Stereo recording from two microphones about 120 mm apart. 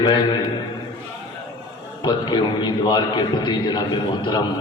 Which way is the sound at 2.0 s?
40° left (ahead or behind).